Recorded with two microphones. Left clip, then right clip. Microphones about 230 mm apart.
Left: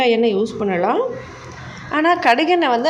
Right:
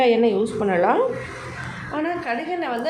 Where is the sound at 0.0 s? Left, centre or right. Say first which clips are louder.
Left 2 dB; left.